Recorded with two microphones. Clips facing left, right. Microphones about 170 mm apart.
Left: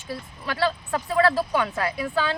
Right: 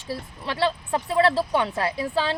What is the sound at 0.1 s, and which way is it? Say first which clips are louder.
Speech: right 1 dB; 30° right (ahead or behind).